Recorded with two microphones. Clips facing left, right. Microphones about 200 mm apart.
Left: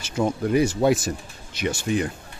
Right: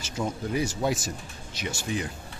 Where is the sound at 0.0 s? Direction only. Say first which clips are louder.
Left 7 dB; 65° left (ahead or behind).